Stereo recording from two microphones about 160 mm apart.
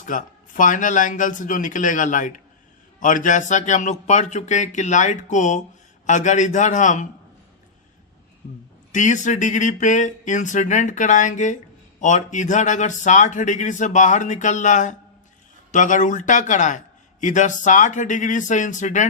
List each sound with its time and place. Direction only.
0.0 s speech: 55° left (ahead or behind)
8.9 s speech: 50° left (ahead or behind)